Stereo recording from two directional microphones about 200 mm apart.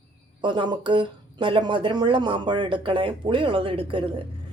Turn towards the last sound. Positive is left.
turn(degrees=-25)  # may be behind; listen again after turning